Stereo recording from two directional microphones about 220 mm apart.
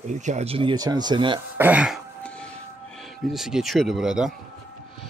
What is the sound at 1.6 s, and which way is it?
Throat clearing, 5° right (ahead or behind).